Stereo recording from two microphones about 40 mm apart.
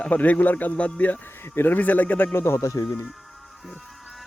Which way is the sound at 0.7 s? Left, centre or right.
Left.